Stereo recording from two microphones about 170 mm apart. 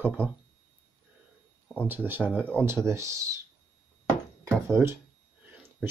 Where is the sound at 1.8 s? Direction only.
10° right (ahead or behind).